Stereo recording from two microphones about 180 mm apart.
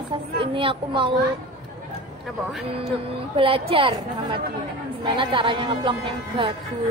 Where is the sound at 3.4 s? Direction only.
30° right (ahead or behind).